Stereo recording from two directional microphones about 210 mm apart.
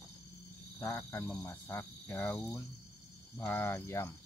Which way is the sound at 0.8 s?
10° left (ahead or behind).